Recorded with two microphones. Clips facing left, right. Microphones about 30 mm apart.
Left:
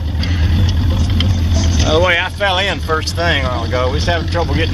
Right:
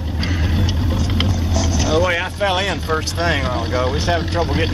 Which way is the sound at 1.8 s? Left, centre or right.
Left.